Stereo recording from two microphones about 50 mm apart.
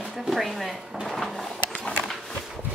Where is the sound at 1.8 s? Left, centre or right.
Centre.